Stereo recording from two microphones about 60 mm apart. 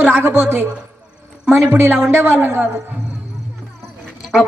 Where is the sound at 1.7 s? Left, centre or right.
Right.